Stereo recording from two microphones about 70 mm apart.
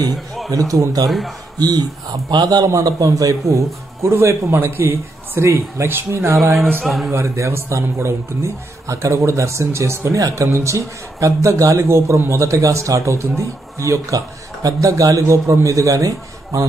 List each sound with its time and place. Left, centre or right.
0.5 s a man's voice: right
2.7 s a man's voice: right
6.8 s a man's voice: centre
7.1 s a man's voice: right